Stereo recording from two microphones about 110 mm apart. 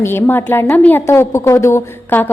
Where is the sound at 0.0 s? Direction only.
20° left (ahead or behind).